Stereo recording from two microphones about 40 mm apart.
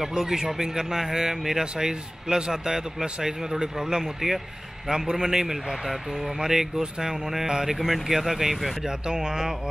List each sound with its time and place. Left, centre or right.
0.1 s speech: centre